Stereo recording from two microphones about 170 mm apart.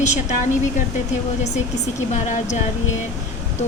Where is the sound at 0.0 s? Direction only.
45° left (ahead or behind).